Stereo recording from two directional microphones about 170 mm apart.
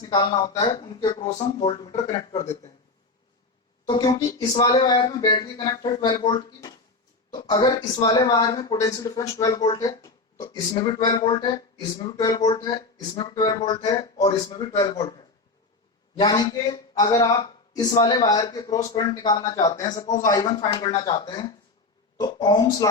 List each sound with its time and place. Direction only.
0.0 s speech: 25° left (ahead or behind)
1.3 s speech: 40° left (ahead or behind)
1.8 s speech: 20° left (ahead or behind)
2.1 s speech: 35° left (ahead or behind)
3.8 s speech: 25° left (ahead or behind)
16.1 s speech: 25° left (ahead or behind)